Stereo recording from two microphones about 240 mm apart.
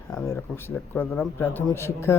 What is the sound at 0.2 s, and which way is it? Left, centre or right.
Speech, centre.